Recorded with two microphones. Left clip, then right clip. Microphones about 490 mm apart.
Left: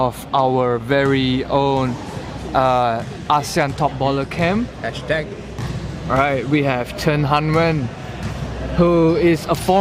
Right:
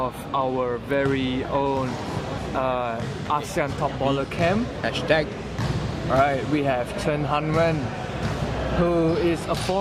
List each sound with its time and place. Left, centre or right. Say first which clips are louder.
0.0 s speech: left 7 dB; left
4.9 s speech: right 1 dB; left
6.1 s speech: left 4 dB; left
8.8 s speech: left 8 dB; left